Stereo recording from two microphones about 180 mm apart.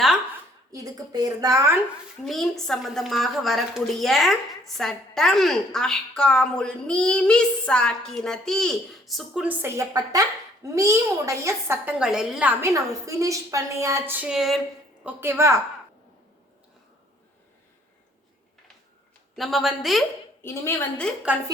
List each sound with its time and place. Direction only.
0.7 s a woman's voice: 20° right (ahead or behind)
2.2 s a woman's voice: centre (ahead or behind)
15.0 s a woman's voice: 10° right (ahead or behind)
19.4 s a woman's voice: centre (ahead or behind)
20.4 s a woman's voice: 15° left (ahead or behind)